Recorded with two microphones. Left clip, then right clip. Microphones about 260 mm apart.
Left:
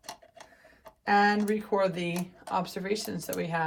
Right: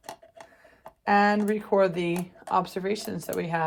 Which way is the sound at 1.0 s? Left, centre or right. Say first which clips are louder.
Right 2 dB; right.